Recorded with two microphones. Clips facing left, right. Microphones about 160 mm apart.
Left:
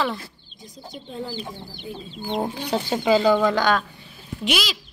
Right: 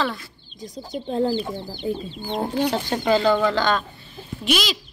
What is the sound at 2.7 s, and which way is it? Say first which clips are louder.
Speech: left 1 dB; 5° left (ahead or behind).